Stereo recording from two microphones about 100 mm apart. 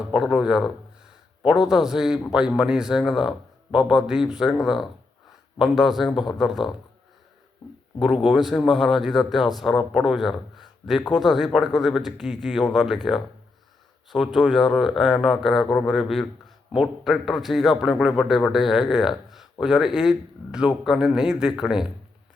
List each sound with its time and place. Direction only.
0.1 s speech: 5° right (ahead or behind)
1.7 s speech: 5° right (ahead or behind)
8.3 s speech: centre (ahead or behind)
10.9 s speech: 45° left (ahead or behind)
11.2 s speech: centre (ahead or behind)
14.3 s speech: 5° left (ahead or behind)